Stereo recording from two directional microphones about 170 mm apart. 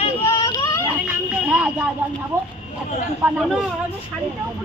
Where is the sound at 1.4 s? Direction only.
10° right (ahead or behind).